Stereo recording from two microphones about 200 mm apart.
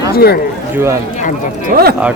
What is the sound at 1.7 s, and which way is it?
Speech, 50° right (ahead or behind).